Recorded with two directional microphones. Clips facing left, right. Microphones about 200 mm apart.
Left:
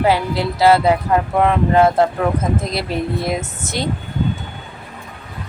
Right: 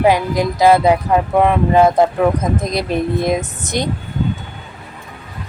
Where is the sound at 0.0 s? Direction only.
15° right (ahead or behind).